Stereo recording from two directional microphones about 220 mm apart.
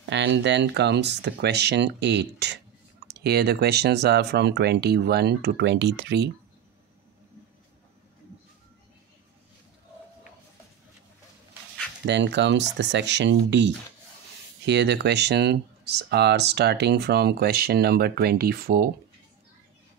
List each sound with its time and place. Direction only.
0.1 s speech: 55° right (ahead or behind)
12.1 s speech: 50° right (ahead or behind)
14.7 s speech: 50° right (ahead or behind)